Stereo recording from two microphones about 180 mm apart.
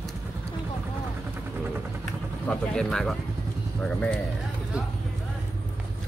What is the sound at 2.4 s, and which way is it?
Speech, 5° left (ahead or behind).